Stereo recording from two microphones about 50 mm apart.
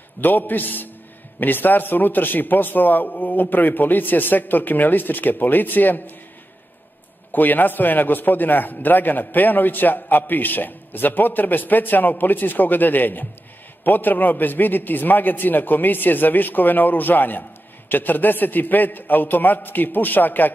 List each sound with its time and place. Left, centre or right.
0.2 s a man's voice: left
7.3 s a man's voice: left